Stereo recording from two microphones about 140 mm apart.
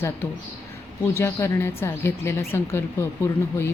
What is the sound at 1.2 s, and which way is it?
A woman's voice, 20° left (ahead or behind).